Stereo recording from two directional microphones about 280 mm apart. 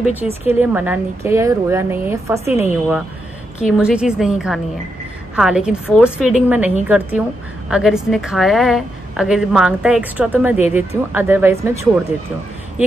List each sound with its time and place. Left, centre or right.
0.5 s a woman's voice: centre
2.4 s a woman's voice: left
3.5 s a woman's voice: centre